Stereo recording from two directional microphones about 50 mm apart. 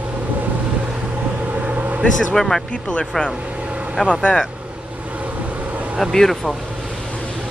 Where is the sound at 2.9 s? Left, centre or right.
Left.